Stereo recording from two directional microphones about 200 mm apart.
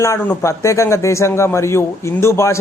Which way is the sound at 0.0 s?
10° left (ahead or behind).